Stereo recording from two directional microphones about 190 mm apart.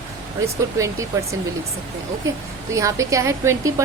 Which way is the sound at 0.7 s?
15° right (ahead or behind).